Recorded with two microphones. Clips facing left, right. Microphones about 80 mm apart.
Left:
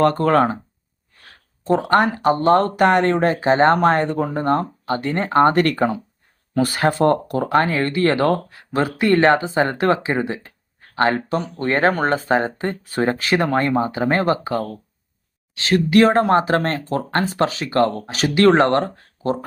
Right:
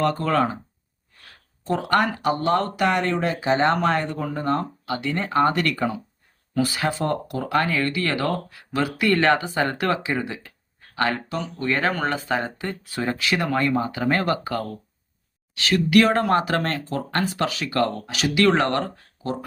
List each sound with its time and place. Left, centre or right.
0.0 s speech: left
1.6 s speech: left